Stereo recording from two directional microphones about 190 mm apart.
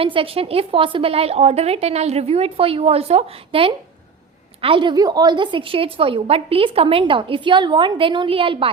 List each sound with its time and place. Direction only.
0.0 s a woman's voice: 30° right (ahead or behind)